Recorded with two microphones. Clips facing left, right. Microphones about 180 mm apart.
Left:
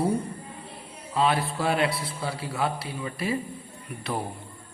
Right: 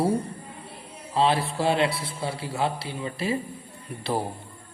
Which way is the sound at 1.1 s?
30° right (ahead or behind).